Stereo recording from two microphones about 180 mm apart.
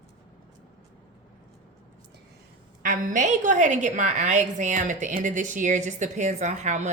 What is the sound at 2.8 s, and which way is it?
A woman's voice, 50° right (ahead or behind).